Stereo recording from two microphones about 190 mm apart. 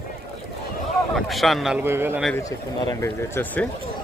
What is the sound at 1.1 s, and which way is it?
Speech, centre (ahead or behind).